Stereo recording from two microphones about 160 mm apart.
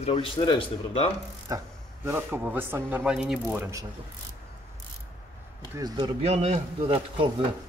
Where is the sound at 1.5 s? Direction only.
20° right (ahead or behind); by 3.6 s 5° right (ahead or behind).